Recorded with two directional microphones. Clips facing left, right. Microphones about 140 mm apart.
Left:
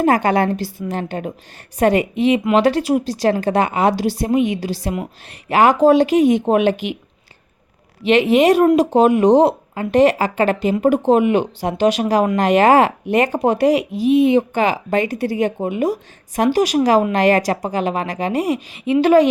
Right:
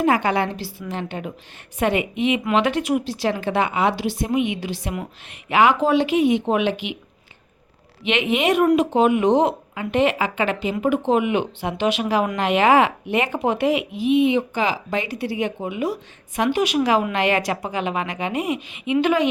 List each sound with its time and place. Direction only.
0.0 s speech: 45° left (ahead or behind)
8.0 s speech: 35° left (ahead or behind)